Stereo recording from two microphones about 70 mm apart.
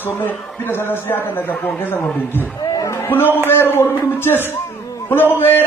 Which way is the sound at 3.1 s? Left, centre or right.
Left.